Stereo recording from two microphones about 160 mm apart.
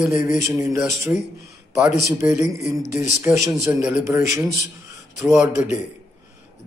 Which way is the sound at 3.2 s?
20° right (ahead or behind).